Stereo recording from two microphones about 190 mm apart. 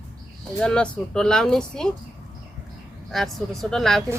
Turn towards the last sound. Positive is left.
turn(degrees=0)  # may be behind; listen again after turning